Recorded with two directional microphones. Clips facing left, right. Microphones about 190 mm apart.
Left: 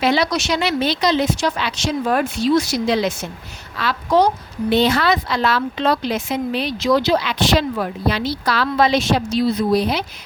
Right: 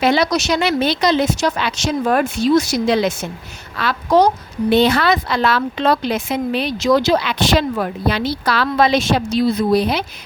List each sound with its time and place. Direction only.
0.0 s a woman's voice: 50° right (ahead or behind)